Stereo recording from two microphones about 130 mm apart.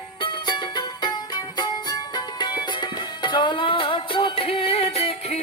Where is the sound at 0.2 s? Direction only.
35° left (ahead or behind).